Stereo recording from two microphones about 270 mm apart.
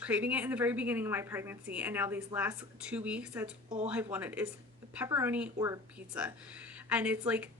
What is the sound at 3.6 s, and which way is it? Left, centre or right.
Speech, right.